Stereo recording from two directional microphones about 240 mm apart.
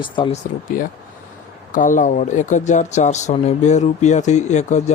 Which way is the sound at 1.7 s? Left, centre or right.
Left.